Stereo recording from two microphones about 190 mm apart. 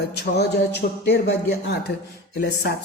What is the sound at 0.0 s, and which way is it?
Speech, 60° left (ahead or behind).